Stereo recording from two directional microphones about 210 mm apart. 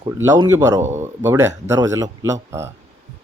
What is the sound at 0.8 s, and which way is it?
Speech, 35° right (ahead or behind).